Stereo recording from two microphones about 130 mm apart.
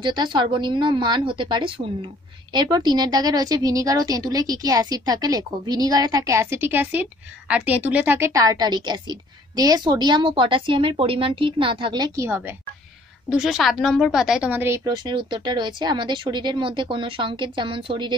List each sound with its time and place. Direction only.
0.0 s a woman's voice: 35° right (ahead or behind); by 8.3 s 15° right (ahead or behind)
8.3 s a woman's voice: 25° right (ahead or behind)
12.2 s a woman's voice: 15° right (ahead or behind)
13.3 s a woman's voice: 5° right (ahead or behind)
14.9 s a woman's voice: 35° right (ahead or behind)